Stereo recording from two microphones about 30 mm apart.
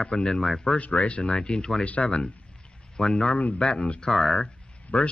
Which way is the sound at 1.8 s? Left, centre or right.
Left.